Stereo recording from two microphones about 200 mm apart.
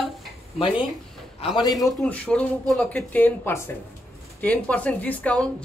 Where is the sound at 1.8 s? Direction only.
5° left (ahead or behind).